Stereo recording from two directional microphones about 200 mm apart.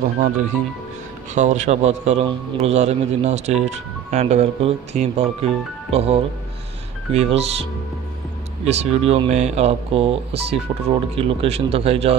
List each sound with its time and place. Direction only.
0.0 s speech: 40° right (ahead or behind)
8.6 s speech: 30° right (ahead or behind)